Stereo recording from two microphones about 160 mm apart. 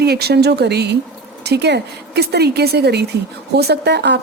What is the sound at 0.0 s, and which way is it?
A woman's voice, 90° right.